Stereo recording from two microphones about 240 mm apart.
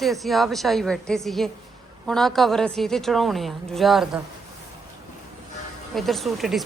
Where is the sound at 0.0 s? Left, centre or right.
Centre.